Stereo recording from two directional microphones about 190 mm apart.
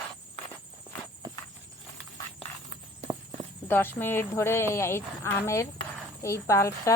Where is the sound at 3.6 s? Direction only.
10° left (ahead or behind).